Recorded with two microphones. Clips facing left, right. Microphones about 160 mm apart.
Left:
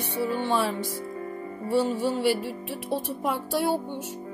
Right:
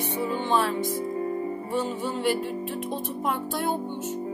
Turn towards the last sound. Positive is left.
turn(degrees=10)  # may be behind; listen again after turning